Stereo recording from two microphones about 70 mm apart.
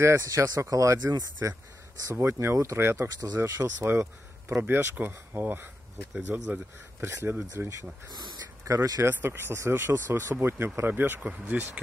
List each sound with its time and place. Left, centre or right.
0.0 s speech: right
1.4 s speech: right; by 6.6 s centre
7.3 s speech: right
8.1 s a sound: right
8.6 s speech: right
9.0 s speech: right